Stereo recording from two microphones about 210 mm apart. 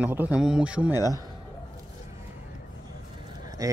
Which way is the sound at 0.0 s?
10° right (ahead or behind).